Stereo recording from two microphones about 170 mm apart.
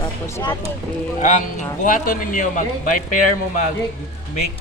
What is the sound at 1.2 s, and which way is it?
Speech, 45° left (ahead or behind).